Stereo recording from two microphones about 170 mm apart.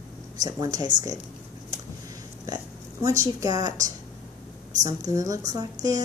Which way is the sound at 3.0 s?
20° right (ahead or behind).